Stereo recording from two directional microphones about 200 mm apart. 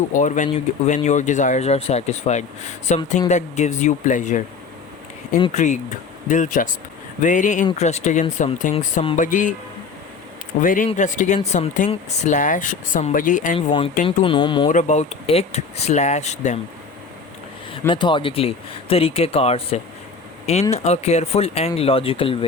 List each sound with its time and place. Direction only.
0.1 s speech: 40° left (ahead or behind)
10.6 s speech: 40° left (ahead or behind)
13.7 s speech: 25° left (ahead or behind)
14.7 s speech: 35° left (ahead or behind)
17.7 s speech: 25° left (ahead or behind)